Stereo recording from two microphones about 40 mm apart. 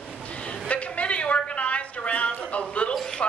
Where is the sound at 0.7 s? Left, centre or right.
Left.